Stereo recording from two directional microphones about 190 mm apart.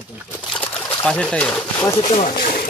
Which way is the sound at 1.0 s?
5° left (ahead or behind).